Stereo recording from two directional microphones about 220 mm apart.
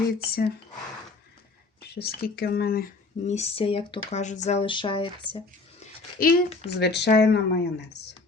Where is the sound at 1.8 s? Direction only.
45° left (ahead or behind); by 5.8 s 25° left (ahead or behind).